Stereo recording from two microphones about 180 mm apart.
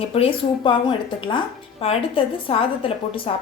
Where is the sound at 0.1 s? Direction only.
30° left (ahead or behind).